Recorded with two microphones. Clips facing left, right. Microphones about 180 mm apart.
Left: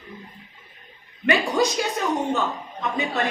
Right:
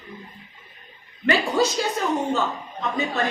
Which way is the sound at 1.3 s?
15° left (ahead or behind).